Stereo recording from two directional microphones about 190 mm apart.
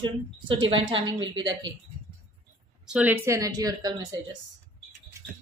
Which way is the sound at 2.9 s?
5° right (ahead or behind).